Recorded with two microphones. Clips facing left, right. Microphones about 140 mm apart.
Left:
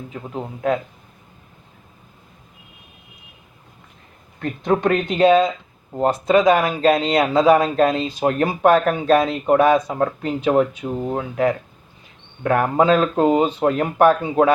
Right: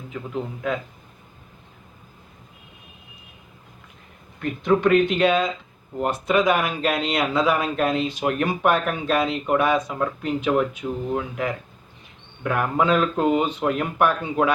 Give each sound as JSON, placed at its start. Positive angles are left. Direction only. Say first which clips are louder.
{"t": 0.1, "sound": "speech", "louder": "right 3 dB", "side_deg": 40}
{"t": 4.4, "sound": "speech", "louder": "left 1 dB", "side_deg": 40}